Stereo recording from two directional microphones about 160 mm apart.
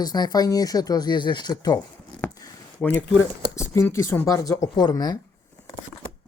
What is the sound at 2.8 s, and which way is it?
Speech, 10° left (ahead or behind).